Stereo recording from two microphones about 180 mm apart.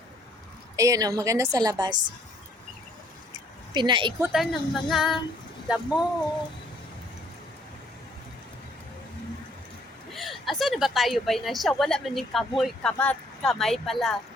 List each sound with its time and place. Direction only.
0.8 s a woman's voice: 20° right (ahead or behind)
3.8 s a woman's voice: 25° right (ahead or behind)
4.2 s a woman's voice: centre (ahead or behind)
10.2 s a woman's voice: centre (ahead or behind)